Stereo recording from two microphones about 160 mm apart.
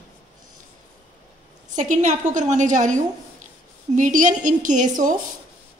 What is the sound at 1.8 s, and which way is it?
A woman's voice, 50° right (ahead or behind).